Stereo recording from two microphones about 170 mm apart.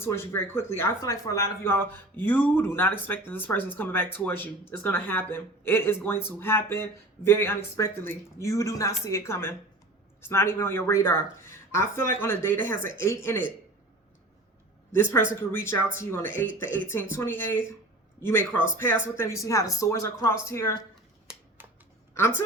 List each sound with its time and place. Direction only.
0.0 s speech: 15° left (ahead or behind)
14.9 s speech: 15° left (ahead or behind)
21.6 s a sound: 10° right (ahead or behind)